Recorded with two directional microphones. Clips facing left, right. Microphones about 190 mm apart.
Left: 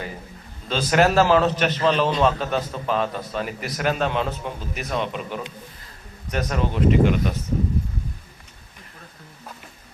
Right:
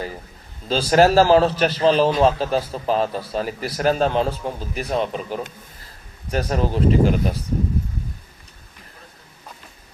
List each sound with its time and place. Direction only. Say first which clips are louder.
0.7 s a man's voice: right 4 dB; 35° right (ahead or behind)